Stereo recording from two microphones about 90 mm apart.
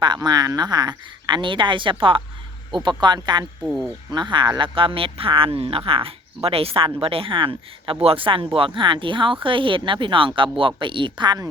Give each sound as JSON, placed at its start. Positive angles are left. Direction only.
{"t": 0.0, "sound": "speech", "side_deg": -55}
{"t": 3.0, "sound": "speech", "side_deg": -55}